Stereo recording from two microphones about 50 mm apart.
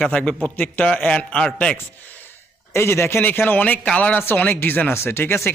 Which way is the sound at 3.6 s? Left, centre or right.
Left.